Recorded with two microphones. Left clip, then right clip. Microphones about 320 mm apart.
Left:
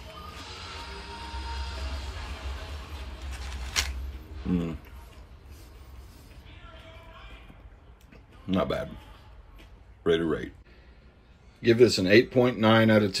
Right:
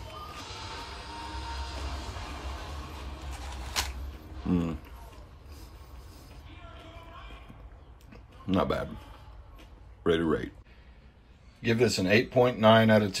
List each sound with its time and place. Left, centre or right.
4.5 s a man's voice: centre
8.5 s a man's voice: centre
10.0 s speech: centre
11.6 s speech: left